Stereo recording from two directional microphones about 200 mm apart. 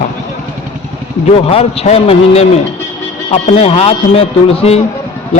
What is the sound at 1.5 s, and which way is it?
A man's voice, 30° left (ahead or behind).